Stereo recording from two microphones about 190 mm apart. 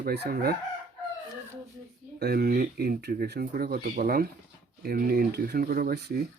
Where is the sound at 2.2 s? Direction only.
55° right (ahead or behind).